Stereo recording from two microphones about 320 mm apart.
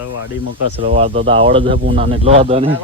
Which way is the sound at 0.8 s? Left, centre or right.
Centre.